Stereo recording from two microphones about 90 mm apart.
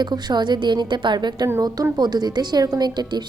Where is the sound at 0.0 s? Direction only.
55° right (ahead or behind).